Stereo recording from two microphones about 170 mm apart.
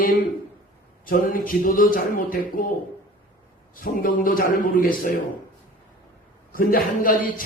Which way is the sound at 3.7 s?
55° left (ahead or behind).